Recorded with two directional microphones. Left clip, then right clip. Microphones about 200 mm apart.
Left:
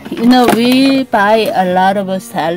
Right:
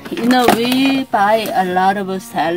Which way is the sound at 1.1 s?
45° left (ahead or behind).